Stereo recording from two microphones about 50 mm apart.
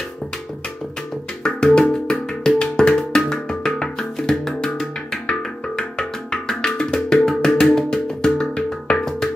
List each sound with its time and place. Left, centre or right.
1.4 s music: centre